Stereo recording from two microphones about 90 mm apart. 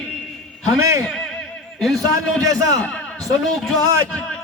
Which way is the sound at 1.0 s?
10° left (ahead or behind).